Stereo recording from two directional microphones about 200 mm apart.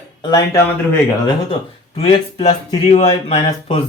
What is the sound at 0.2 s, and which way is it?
Speech, 20° left (ahead or behind).